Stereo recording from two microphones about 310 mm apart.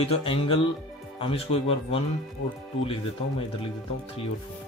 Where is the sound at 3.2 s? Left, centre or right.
Centre.